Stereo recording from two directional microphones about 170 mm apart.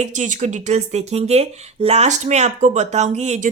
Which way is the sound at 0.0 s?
45° right (ahead or behind).